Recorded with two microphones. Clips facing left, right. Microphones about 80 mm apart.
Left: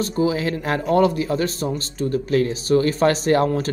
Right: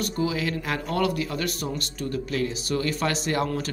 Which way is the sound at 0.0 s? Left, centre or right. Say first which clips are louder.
Left 6 dB; left.